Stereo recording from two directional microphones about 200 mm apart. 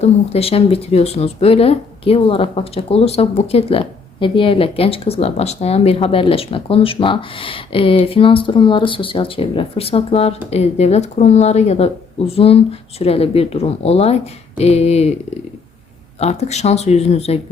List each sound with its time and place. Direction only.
0.0 s speech: 30° left (ahead or behind)
16.2 s speech: 35° left (ahead or behind)